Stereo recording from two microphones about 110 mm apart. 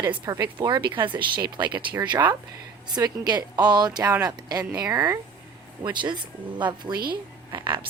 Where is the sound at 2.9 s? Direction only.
40° right (ahead or behind).